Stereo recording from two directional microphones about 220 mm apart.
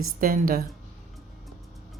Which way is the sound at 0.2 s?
40° right (ahead or behind).